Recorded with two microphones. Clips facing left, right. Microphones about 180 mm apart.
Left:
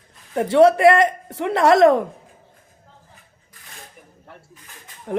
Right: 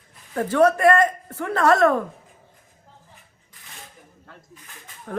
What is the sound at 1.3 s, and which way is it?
Speech, 20° left (ahead or behind).